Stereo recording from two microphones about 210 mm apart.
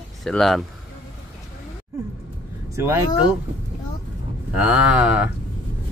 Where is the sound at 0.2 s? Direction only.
Centre (ahead or behind).